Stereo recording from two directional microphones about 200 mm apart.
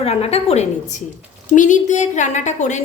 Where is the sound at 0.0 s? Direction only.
30° left (ahead or behind).